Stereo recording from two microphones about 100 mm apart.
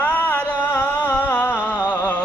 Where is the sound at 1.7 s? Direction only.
15° right (ahead or behind).